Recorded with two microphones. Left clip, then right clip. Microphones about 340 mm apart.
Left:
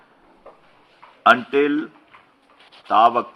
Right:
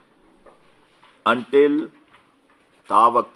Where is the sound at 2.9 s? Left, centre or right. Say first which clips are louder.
Even; centre.